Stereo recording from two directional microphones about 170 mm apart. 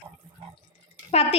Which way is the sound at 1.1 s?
35° left (ahead or behind).